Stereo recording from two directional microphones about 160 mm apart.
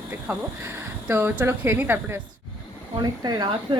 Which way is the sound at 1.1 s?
10° right (ahead or behind).